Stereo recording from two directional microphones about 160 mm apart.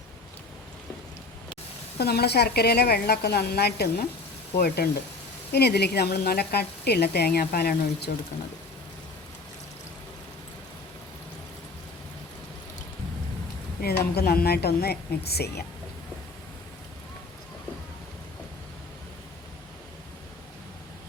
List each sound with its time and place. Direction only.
2.0 s a woman's voice: 85° left
4.5 s speech: 75° left (ahead or behind)
5.5 s a woman's voice: 90° left
6.5 s a woman's voice: 90° left
13.8 s a woman's voice: 75° left (ahead or behind)